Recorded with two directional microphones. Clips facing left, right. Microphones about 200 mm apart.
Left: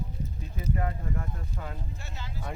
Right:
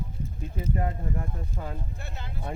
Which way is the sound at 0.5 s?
25° right (ahead or behind).